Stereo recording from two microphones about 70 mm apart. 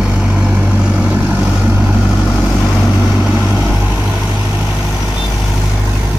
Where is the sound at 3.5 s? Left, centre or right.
Centre.